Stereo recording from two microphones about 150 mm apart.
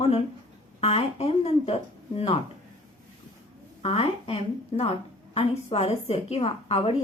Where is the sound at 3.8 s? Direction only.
40° left (ahead or behind).